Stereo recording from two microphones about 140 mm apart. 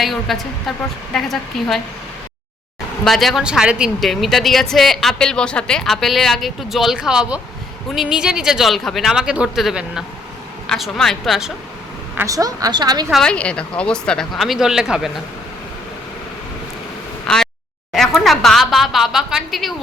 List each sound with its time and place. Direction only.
0.0 s a woman's voice: centre (ahead or behind)
3.0 s a woman's voice: centre (ahead or behind)
12.1 s a woman's voice: 20° right (ahead or behind)
13.1 s a woman's voice: 5° left (ahead or behind)
17.2 s a sound: 5° left (ahead or behind)